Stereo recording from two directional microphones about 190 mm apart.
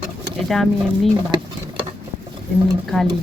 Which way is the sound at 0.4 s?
Centre (ahead or behind).